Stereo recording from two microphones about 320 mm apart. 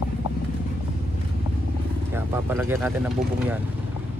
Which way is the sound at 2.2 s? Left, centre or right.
Centre.